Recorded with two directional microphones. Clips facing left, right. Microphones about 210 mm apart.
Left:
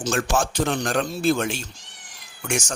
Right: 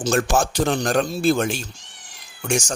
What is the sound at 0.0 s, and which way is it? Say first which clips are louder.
Speech: right 3 dB; 40° right (ahead or behind).